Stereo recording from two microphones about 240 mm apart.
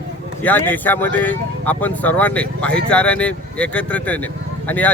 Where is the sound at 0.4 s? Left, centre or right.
Centre.